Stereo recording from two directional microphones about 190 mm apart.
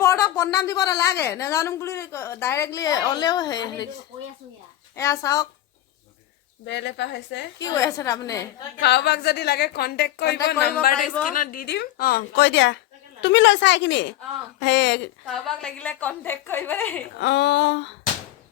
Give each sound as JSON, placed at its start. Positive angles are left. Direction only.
{"t": 0.0, "sound": "a woman's voice", "side_deg": 15}
{"t": 4.9, "sound": "a woman's voice", "side_deg": 15}
{"t": 6.7, "sound": "speech", "side_deg": 65}
{"t": 7.6, "sound": "a woman's voice", "side_deg": 20}
{"t": 8.8, "sound": "a woman's voice", "side_deg": 60}
{"t": 15.3, "sound": "a woman's voice", "side_deg": 5}
{"t": 17.2, "sound": "speech", "side_deg": 65}